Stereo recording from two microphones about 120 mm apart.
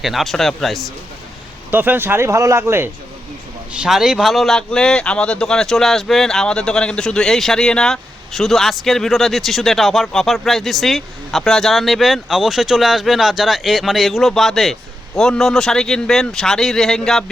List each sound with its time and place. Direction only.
0.0 s speech: centre (ahead or behind)
1.7 s speech: 15° right (ahead or behind)
3.7 s speech: 5° right (ahead or behind)